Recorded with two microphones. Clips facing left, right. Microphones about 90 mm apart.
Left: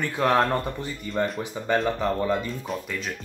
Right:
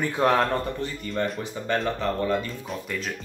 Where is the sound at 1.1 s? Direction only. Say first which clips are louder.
Left 3 dB; 15° left (ahead or behind).